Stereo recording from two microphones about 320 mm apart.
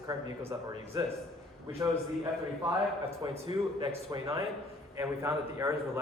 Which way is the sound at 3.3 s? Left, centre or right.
Centre.